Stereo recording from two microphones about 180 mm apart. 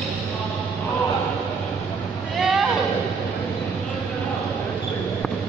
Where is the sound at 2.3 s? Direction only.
Centre (ahead or behind).